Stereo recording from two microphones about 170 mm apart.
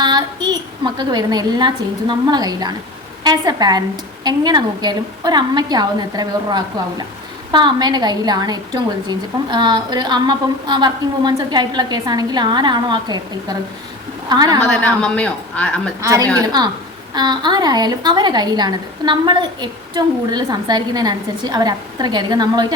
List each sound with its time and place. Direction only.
0.0 s a woman's voice: 25° right (ahead or behind)
14.7 s speech: 5° left (ahead or behind)
16.0 s a woman's voice: 20° right (ahead or behind)